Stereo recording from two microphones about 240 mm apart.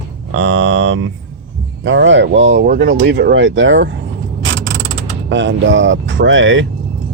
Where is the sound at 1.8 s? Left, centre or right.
Right.